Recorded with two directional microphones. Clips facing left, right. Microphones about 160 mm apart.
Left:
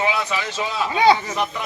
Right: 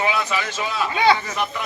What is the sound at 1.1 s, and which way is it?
Speech, 15° left (ahead or behind).